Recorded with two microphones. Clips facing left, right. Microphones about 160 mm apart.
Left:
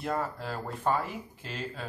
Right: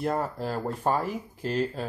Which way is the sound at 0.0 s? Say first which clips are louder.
Right 4 dB; 40° right (ahead or behind).